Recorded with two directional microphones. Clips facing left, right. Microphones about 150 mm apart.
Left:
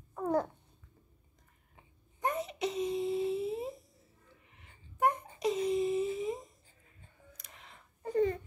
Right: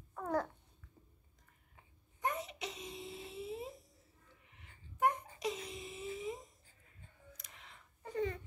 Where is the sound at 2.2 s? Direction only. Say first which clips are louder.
Left 6 dB; 30° left (ahead or behind).